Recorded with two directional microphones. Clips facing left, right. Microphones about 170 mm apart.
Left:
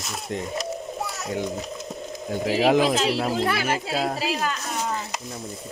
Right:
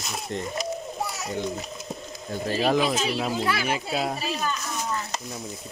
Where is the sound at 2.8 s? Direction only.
90° left.